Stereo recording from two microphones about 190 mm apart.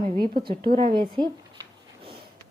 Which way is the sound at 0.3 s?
25° right (ahead or behind).